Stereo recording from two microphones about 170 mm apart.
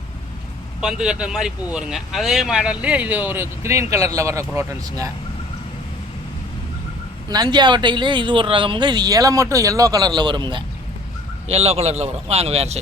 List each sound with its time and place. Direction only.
0.8 s speech: 5° right (ahead or behind)
7.3 s speech: 25° right (ahead or behind)
11.4 s speech: 35° right (ahead or behind)